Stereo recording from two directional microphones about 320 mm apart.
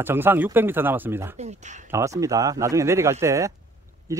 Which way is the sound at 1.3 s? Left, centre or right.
Right.